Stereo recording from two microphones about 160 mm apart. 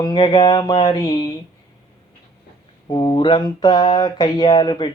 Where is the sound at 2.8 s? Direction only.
30° left (ahead or behind).